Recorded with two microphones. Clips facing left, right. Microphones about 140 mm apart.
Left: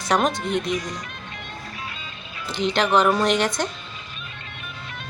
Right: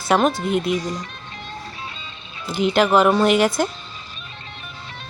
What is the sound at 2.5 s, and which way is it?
Speech, 10° right (ahead or behind).